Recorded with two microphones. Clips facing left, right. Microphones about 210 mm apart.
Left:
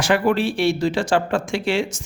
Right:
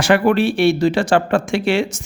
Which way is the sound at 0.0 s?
65° right (ahead or behind).